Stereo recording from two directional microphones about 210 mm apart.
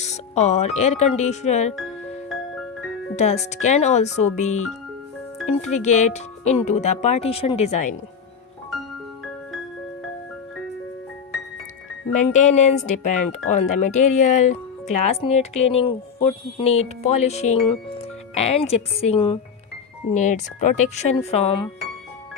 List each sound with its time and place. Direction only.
0.0 s speech: 30° left (ahead or behind)
3.2 s speech: 30° left (ahead or behind)
12.1 s a woman's voice: 35° left (ahead or behind)